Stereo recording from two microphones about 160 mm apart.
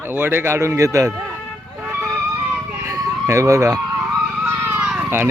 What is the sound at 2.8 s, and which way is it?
Emergency vehicle, 15° right (ahead or behind).